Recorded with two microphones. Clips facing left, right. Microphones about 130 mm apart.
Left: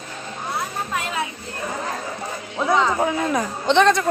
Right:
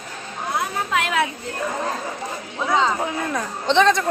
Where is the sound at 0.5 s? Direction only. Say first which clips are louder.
Right 4 dB; 80° right.